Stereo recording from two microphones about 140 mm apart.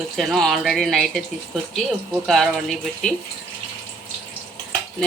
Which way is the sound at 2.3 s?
Centre (ahead or behind).